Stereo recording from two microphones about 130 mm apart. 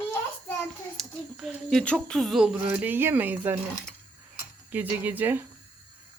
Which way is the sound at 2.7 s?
15° right (ahead or behind).